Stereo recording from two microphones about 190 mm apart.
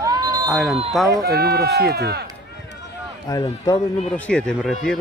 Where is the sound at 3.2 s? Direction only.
20° left (ahead or behind).